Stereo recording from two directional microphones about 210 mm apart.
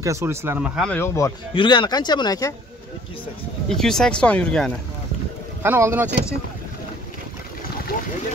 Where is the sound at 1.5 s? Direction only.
20° left (ahead or behind).